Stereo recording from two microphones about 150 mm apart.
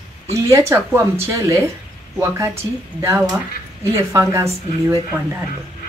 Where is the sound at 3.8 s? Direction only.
20° right (ahead or behind).